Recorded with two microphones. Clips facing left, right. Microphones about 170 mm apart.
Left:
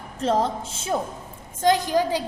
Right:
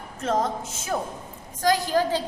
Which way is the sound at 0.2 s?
30° left (ahead or behind).